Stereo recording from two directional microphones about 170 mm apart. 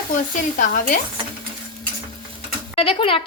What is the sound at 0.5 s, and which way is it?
Speech, 55° left (ahead or behind).